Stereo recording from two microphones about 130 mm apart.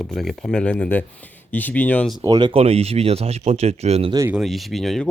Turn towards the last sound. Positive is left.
turn(degrees=0)  # may be behind; listen again after turning